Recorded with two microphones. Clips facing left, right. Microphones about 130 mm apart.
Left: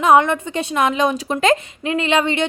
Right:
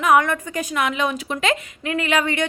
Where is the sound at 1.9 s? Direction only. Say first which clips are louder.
Left 3 dB; 25° left (ahead or behind).